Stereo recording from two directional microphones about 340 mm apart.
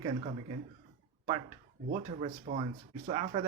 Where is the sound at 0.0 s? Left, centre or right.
Centre.